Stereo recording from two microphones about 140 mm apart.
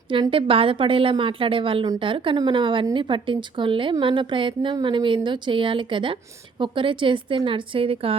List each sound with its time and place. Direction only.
0.1 s a woman's voice: 40° right (ahead or behind)